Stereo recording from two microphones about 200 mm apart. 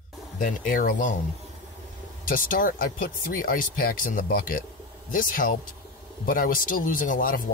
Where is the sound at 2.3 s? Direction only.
45° left (ahead or behind).